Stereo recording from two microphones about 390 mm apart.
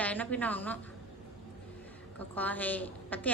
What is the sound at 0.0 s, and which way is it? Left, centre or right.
Speech, centre.